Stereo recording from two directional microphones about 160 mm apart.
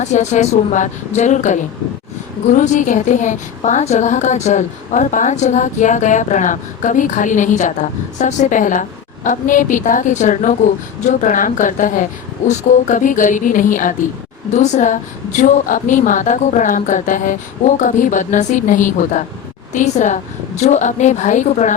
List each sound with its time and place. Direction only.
0.0 s a woman's voice: 45° left (ahead or behind)